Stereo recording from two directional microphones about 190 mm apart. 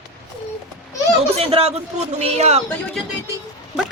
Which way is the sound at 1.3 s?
30° right (ahead or behind).